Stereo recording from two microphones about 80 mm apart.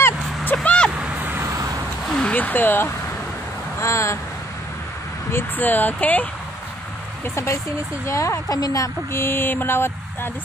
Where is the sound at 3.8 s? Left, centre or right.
Left.